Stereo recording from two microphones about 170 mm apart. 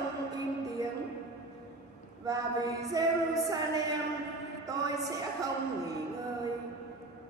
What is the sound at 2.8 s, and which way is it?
Speech, 20° right (ahead or behind).